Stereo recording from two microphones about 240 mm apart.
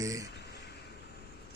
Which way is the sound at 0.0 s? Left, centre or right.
Centre.